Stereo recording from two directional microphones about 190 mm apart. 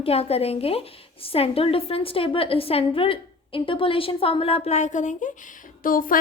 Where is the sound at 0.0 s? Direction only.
30° left (ahead or behind).